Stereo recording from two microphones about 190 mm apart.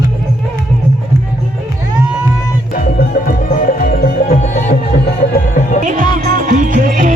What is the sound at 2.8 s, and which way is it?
Music, 50° left (ahead or behind).